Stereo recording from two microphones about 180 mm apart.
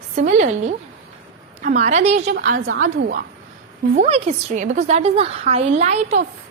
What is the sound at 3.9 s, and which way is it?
A woman's voice, 35° right (ahead or behind).